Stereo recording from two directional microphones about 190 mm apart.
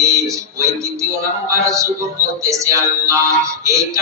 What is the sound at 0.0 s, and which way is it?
Music, 15° right (ahead or behind).